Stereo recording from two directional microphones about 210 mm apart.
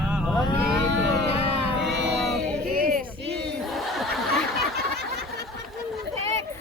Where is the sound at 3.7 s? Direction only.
Centre (ahead or behind).